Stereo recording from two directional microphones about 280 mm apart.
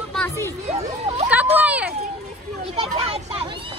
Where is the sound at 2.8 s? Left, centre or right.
Right.